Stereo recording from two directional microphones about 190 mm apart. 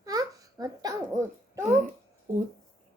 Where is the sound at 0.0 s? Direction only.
20° right (ahead or behind).